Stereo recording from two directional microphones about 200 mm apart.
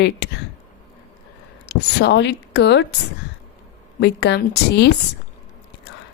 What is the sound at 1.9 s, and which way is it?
Speech, 60° left (ahead or behind).